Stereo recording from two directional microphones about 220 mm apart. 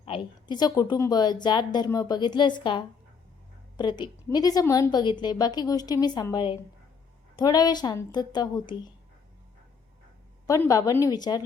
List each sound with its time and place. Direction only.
0.0 s a woman's voice: 20° left (ahead or behind)
10.4 s a woman's voice: 15° left (ahead or behind)